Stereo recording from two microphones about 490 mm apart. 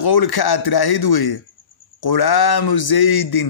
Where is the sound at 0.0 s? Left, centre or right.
Left.